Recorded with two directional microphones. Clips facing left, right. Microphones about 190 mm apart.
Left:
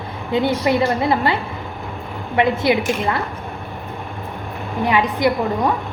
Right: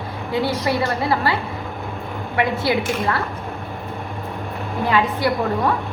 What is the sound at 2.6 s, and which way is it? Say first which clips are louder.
Speech: left 2 dB; 20° left (ahead or behind).